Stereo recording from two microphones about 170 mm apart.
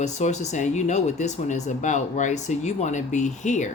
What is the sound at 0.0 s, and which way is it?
Speech, 45° left (ahead or behind).